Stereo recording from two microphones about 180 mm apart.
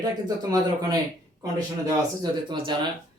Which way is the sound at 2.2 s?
25° right (ahead or behind).